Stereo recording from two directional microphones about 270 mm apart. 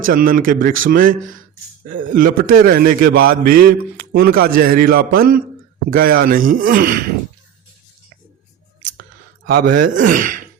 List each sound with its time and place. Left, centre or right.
0.0 s a man's voice: right
9.5 s speech: right